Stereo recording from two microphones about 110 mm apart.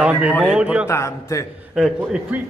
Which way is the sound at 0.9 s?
25° left (ahead or behind).